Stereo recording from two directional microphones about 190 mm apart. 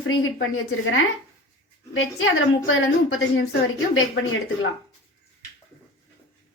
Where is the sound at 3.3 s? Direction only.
65° left (ahead or behind).